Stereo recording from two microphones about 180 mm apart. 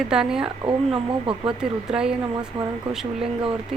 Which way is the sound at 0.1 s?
5° right (ahead or behind).